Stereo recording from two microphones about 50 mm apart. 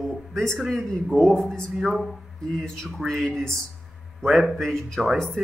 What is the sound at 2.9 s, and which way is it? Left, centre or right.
Speech, centre.